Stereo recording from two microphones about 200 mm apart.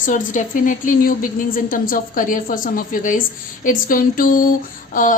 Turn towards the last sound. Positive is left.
turn(degrees=40)  # may be behind; listen again after turning